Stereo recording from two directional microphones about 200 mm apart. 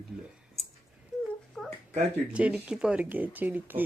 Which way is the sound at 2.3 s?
5° right (ahead or behind).